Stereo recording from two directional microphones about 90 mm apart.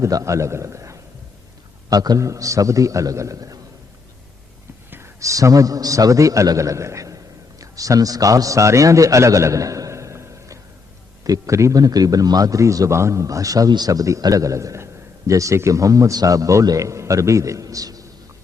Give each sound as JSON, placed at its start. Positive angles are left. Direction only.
{"t": 0.0, "sound": "a man's voice", "side_deg": -35}
{"t": 4.9, "sound": "a man's voice", "side_deg": -30}